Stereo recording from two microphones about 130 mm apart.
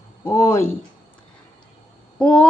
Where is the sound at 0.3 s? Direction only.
20° left (ahead or behind).